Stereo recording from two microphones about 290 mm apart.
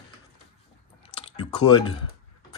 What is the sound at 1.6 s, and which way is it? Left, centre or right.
Speech, centre.